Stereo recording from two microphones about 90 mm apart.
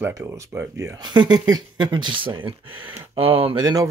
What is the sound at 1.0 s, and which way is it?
Speech, 55° right (ahead or behind).